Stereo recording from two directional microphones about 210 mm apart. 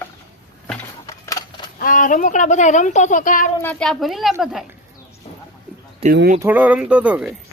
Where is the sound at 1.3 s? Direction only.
20° left (ahead or behind).